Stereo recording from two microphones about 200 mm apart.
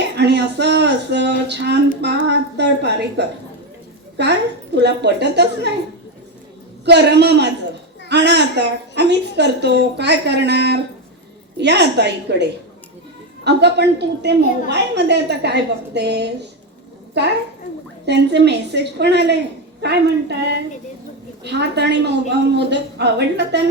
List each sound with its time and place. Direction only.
0.2 s a woman's voice: 55° right (ahead or behind)
6.8 s a woman's voice: 55° right (ahead or behind)
21.4 s a woman's voice: 55° right (ahead or behind)